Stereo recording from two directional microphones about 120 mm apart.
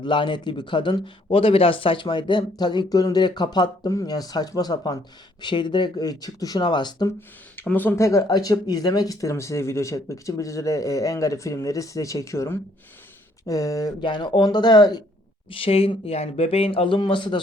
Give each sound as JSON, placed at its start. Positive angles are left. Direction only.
{"t": 0.0, "sound": "a man's voice", "side_deg": 40}
{"t": 7.5, "sound": "a man's voice", "side_deg": 15}
{"t": 15.4, "sound": "speech", "side_deg": 50}